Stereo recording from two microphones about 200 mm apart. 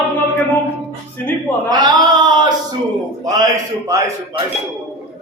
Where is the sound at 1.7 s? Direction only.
20° right (ahead or behind).